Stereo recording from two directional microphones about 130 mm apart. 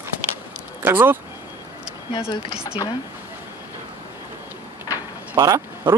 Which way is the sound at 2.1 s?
40° left (ahead or behind).